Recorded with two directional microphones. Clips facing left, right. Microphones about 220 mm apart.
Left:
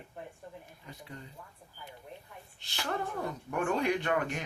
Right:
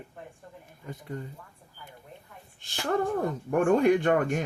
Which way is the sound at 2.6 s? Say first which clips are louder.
Right 8 dB; 50° right (ahead or behind).